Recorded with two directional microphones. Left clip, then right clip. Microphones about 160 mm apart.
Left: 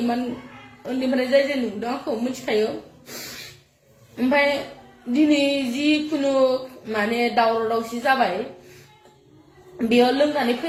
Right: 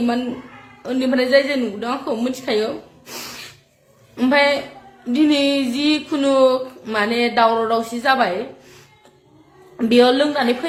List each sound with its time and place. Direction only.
0.8 s speech: 25° right (ahead or behind)
3.1 s a sound: 30° right (ahead or behind)
4.2 s speech: 25° right (ahead or behind)